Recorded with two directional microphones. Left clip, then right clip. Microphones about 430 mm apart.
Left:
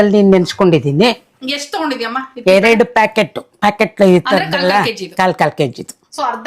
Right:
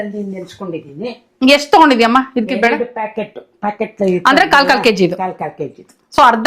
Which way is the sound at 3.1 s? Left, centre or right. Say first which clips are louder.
Left 8 dB; left.